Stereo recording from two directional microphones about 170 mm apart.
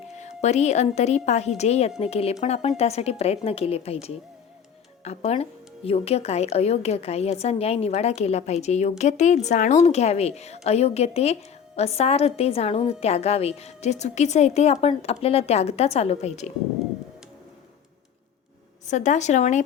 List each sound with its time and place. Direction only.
0.2 s speech: 40° left (ahead or behind)
18.9 s speech: 45° left (ahead or behind)